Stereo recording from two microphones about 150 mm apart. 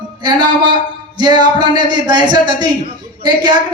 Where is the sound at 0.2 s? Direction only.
30° right (ahead or behind).